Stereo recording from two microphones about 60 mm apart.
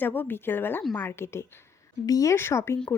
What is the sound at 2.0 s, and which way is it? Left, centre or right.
Speech, left.